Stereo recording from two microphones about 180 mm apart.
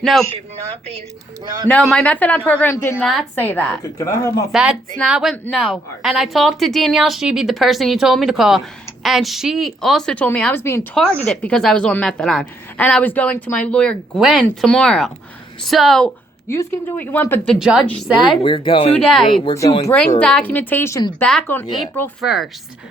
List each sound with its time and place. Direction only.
0.0 s a woman's voice: centre (ahead or behind)
1.6 s speech: 5° left (ahead or behind)
3.0 s a woman's voice: centre (ahead or behind)
3.3 s speech: 10° left (ahead or behind)
4.5 s a woman's voice: 5° right (ahead or behind); by 10.8 s 15° left (ahead or behind)
11.3 s a woman's voice: 5° left (ahead or behind)
18.4 s speech: 30° left (ahead or behind)
18.9 s a woman's voice: centre (ahead or behind)
22.2 s a woman's voice: centre (ahead or behind)